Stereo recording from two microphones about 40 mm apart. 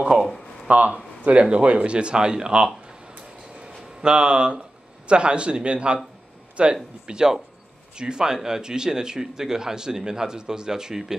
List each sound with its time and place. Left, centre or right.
0.7 s speech: right
1.4 s speech: right
4.0 s speech: right